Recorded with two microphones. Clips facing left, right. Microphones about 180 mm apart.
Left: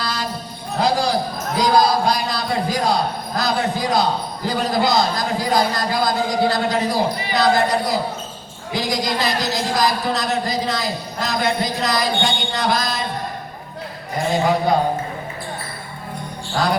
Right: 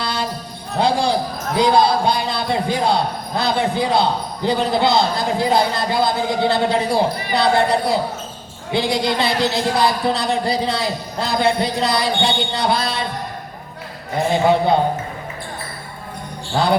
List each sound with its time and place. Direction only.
0.0 s a sound: 30° right (ahead or behind)
0.8 s basketball bounce: 30° right (ahead or behind)
1.6 s a man's voice: 30° right (ahead or behind)